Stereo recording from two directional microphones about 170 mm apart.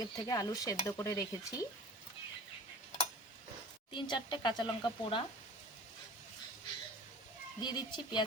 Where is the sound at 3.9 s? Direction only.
25° left (ahead or behind).